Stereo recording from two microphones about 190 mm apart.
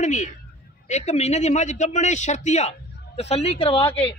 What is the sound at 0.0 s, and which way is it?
A man's voice, 40° left (ahead or behind).